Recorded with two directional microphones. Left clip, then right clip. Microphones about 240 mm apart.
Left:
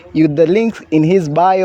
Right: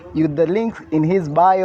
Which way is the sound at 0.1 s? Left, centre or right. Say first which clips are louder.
Left 6 dB; left.